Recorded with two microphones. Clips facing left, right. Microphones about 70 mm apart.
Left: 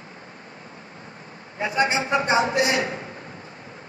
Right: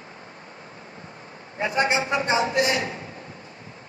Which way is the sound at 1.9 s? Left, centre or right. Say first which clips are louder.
Left 2 dB; left.